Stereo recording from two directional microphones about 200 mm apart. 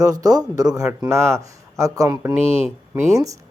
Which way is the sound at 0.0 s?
20° right (ahead or behind).